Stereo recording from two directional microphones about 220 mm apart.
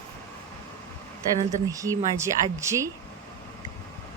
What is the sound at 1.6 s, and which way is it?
A woman's voice, 15° right (ahead or behind).